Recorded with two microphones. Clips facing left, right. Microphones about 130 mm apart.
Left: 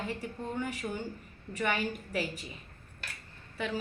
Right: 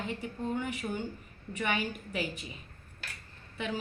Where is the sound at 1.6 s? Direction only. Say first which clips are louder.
Left 1 dB; 10° right (ahead or behind).